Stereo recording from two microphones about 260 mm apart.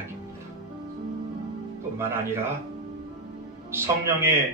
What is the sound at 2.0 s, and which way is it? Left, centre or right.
Speech, centre.